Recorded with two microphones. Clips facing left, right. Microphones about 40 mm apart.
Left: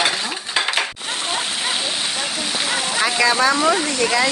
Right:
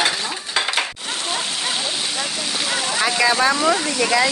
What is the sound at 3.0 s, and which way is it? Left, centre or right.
Speech, centre.